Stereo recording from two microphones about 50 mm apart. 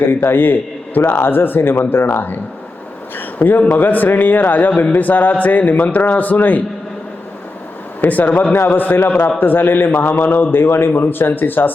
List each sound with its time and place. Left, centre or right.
0.1 s a man's voice: left
8.0 s a man's voice: left